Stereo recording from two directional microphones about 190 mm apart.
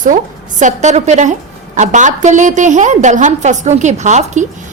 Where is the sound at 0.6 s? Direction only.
40° right (ahead or behind).